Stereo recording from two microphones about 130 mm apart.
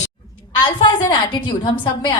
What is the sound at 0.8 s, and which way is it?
A woman's voice, 35° left (ahead or behind).